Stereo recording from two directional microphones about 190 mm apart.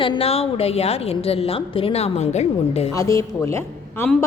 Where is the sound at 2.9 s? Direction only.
15° left (ahead or behind).